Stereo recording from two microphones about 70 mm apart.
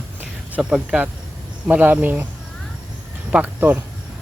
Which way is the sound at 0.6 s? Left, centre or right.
Centre.